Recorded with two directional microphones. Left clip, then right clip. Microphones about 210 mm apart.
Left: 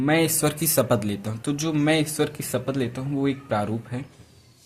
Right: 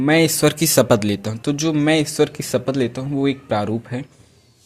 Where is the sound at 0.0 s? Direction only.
35° right (ahead or behind).